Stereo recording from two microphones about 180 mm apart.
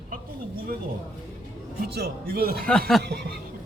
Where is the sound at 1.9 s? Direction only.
55° right (ahead or behind).